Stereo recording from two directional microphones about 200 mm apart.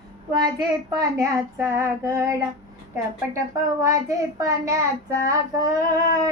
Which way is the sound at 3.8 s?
15° right (ahead or behind).